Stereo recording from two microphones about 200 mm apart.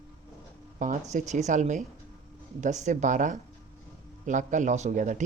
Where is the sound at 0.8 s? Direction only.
40° right (ahead or behind).